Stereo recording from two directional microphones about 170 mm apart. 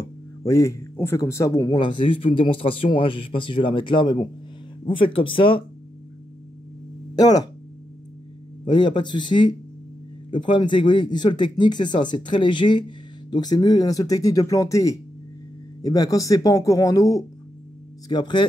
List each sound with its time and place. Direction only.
0.5 s speech: 15° left (ahead or behind)
7.2 s speech: 20° left (ahead or behind)
8.6 s speech: 25° left (ahead or behind)